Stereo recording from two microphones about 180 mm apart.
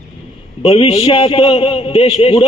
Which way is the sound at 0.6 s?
35° left (ahead or behind).